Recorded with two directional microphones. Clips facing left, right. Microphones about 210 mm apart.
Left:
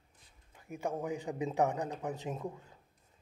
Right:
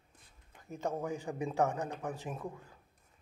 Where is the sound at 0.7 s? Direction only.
15° left (ahead or behind).